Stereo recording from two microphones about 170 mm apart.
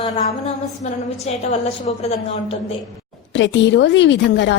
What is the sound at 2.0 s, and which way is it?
Speech, 40° left (ahead or behind).